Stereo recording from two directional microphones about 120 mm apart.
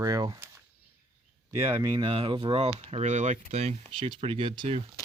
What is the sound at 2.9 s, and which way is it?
Speech, 75° right (ahead or behind).